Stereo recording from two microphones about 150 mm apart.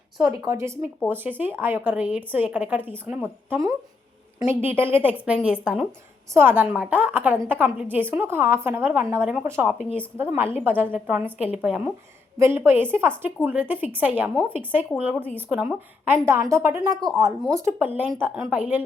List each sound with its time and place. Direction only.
0.2 s a woman's voice: 15° right (ahead or behind)
18.5 s a woman's voice: 10° right (ahead or behind)